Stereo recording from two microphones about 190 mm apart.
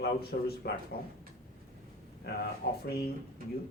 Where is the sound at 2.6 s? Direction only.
60° left (ahead or behind).